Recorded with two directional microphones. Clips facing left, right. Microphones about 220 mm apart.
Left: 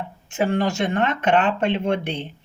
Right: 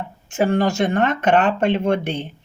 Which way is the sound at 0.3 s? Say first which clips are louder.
Right 3 dB; 45° right (ahead or behind).